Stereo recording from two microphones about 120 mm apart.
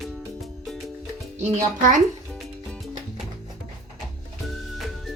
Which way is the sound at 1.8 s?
90° right.